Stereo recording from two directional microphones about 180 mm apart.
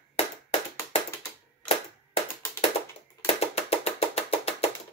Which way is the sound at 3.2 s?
35° left (ahead or behind).